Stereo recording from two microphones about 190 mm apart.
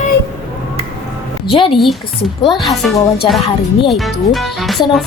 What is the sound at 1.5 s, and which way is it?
Speech, 25° left (ahead or behind).